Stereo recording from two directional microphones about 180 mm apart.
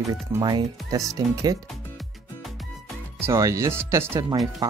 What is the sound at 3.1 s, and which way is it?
Speech, 15° right (ahead or behind).